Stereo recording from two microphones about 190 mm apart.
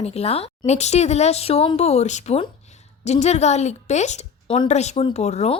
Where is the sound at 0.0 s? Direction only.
30° left (ahead or behind).